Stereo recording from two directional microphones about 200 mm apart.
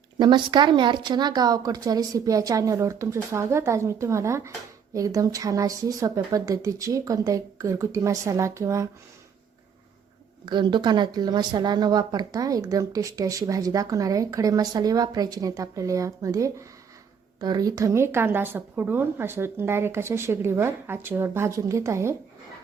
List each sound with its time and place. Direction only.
0.2 s speech: 20° right (ahead or behind)
10.4 s speech: 25° right (ahead or behind)